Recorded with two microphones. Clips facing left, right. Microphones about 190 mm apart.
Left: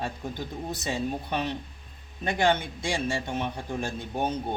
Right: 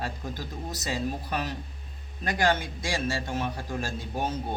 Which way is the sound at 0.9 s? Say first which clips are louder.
Left 1 dB; 25° left (ahead or behind).